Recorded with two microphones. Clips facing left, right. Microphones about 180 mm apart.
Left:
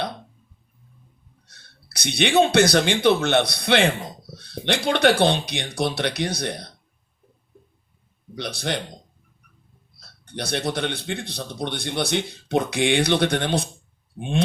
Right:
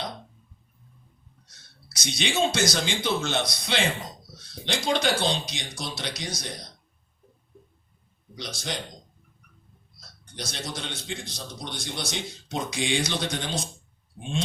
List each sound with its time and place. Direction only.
1.5 s a man's voice: 60° left (ahead or behind)
8.4 s a man's voice: 60° left (ahead or behind)
10.2 s a man's voice: 60° left (ahead or behind)